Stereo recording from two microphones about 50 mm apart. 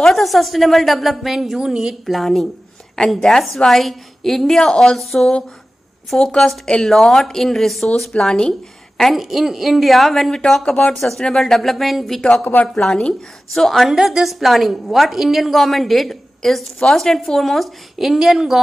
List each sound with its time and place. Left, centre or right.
0.0 s a woman's voice: centre
2.0 s a woman's voice: centre
6.1 s a woman's voice: centre
12.2 s a woman's voice: centre
13.6 s a woman's voice: centre
13.8 s a woman's voice: centre